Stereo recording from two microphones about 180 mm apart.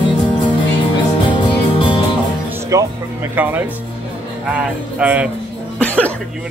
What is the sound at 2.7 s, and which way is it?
Speech, 10° right (ahead or behind).